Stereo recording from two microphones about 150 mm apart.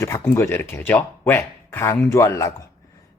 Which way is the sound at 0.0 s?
15° left (ahead or behind).